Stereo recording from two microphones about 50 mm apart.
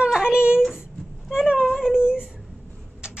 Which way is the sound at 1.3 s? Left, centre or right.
Centre.